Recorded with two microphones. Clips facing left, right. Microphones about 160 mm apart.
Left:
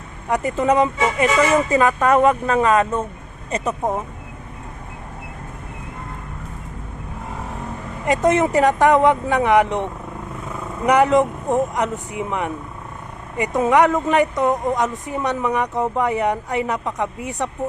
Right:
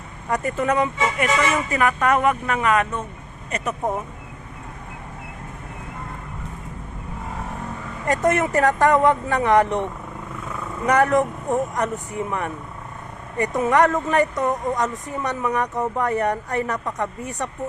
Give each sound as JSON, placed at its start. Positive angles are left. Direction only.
{"t": 0.3, "sound": "speech", "side_deg": 15}
{"t": 8.0, "sound": "a woman's voice", "side_deg": 15}